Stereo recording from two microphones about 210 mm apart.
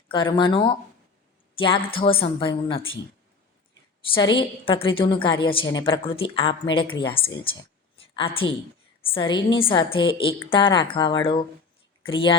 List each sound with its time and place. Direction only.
0.1 s a woman's voice: 20° left (ahead or behind)
4.1 s a woman's voice: 25° left (ahead or behind)
7.9 s a sound: 25° left (ahead or behind)
9.1 s a woman's voice: 25° left (ahead or behind)